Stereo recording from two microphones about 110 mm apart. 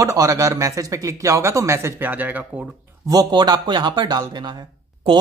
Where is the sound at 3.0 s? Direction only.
35° right (ahead or behind).